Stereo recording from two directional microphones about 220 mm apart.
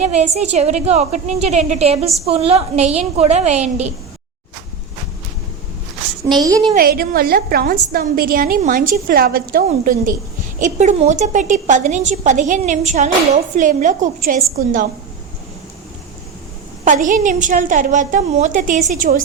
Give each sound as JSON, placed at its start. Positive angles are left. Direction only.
{"t": 0.0, "sound": "a woman's voice", "side_deg": -30}
{"t": 6.2, "sound": "a woman's voice", "side_deg": -20}
{"t": 6.7, "sound": "a woman's voice", "side_deg": -40}
{"t": 16.8, "sound": "a woman's voice", "side_deg": -35}